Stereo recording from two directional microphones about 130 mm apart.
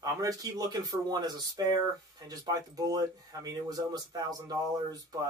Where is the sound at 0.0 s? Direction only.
30° right (ahead or behind).